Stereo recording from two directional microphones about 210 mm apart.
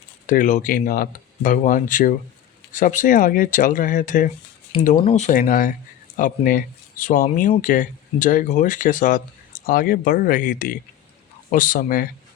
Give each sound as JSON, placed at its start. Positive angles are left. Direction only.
{"t": 0.3, "sound": "speech", "side_deg": 40}